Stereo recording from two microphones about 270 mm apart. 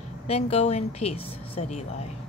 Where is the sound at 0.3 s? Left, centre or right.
Left.